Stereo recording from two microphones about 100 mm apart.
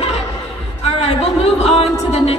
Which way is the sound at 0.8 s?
85° left.